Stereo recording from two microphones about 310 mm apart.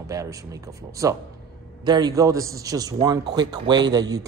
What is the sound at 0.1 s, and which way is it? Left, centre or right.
A man's voice, centre.